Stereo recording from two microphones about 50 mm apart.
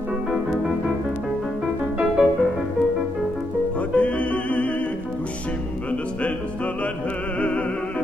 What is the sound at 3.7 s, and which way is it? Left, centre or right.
Music, left.